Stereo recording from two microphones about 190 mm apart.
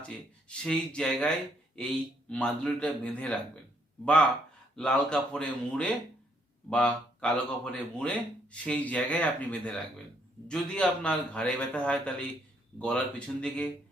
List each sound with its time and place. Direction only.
0.0 s a man's voice: 5° left (ahead or behind)
4.8 s a man's voice: 5° left (ahead or behind)